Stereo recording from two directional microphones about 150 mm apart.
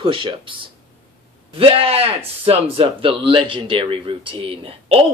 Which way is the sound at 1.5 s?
40° right (ahead or behind).